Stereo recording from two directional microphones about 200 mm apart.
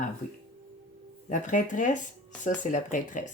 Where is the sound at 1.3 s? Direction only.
40° left (ahead or behind).